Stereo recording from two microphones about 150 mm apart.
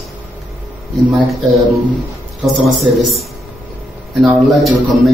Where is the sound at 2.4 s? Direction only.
Centre (ahead or behind).